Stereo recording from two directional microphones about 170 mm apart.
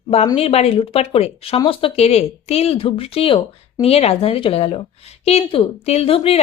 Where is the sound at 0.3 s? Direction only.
35° left (ahead or behind).